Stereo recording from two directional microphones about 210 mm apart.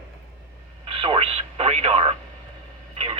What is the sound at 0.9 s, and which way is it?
Radio, 25° right (ahead or behind).